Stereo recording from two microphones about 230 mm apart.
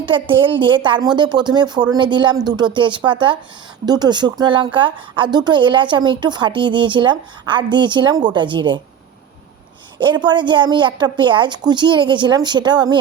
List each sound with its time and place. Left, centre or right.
0.0 s a woman's voice: right
10.0 s a woman's voice: centre